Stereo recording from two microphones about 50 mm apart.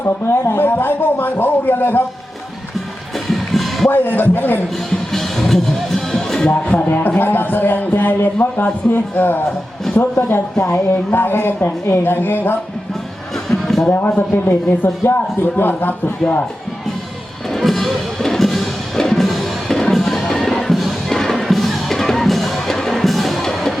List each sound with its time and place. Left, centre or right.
0.0 s a sound: left
3.2 s music: centre
3.8 s a woman's voice: left
4.9 s music: centre
6.5 s a man's voice: left
13.6 s a sound: centre
13.9 s a man's voice: left
16.2 s speech: left
17.5 s music: centre